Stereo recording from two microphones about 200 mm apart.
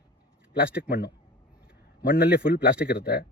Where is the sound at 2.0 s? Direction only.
50° left (ahead or behind).